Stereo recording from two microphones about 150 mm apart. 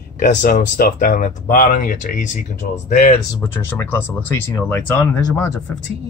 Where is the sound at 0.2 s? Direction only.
75° left (ahead or behind); by 3.2 s 60° left (ahead or behind).